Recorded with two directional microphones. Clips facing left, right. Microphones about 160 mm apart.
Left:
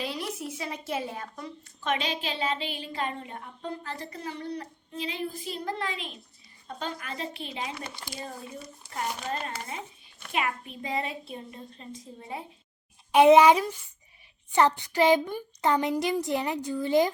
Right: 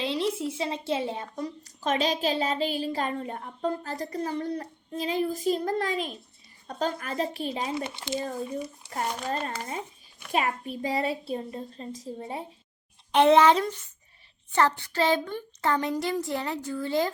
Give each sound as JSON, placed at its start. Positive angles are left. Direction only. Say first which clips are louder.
{"t": 0.0, "sound": "a woman's voice", "louder": "right 6 dB", "side_deg": -25}
{"t": 1.6, "sound": "speech", "louder": "right 3 dB", "side_deg": -40}
{"t": 7.9, "sound": "speech", "louder": "right 7 dB", "side_deg": -20}
{"t": 8.9, "sound": "speech", "louder": "right 1 dB", "side_deg": -35}
{"t": 13.1, "sound": "a woman's voice", "louder": "left 2 dB", "side_deg": 10}